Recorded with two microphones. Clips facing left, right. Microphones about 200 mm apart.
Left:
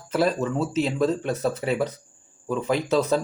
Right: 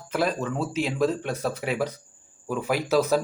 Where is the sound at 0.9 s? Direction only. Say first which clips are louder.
Left 2 dB; centre (ahead or behind).